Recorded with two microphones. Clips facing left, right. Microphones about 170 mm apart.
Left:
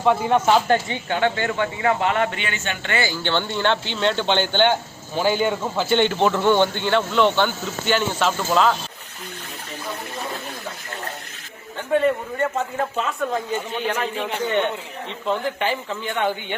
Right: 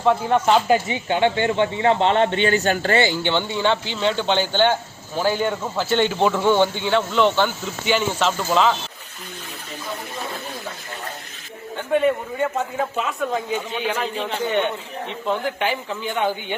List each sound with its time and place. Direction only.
0.0 s speech: centre (ahead or behind)
0.7 s speech: 15° right (ahead or behind); by 3.0 s 40° right (ahead or behind)
3.0 s speech: 15° right (ahead or behind); by 8.7 s centre (ahead or behind)
11.8 s speech: 5° right (ahead or behind)